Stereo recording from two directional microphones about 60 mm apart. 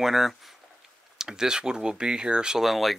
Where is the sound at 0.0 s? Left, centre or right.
Centre.